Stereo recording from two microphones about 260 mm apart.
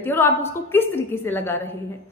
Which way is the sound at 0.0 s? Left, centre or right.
Centre.